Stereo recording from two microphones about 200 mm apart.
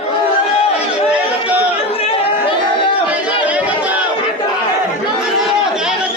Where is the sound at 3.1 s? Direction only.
5° right (ahead or behind).